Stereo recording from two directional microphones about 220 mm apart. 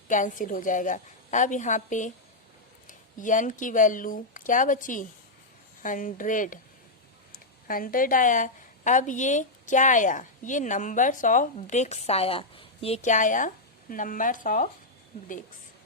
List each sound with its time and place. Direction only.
0.1 s a woman's voice: 35° left (ahead or behind)
7.7 s a woman's voice: 40° left (ahead or behind)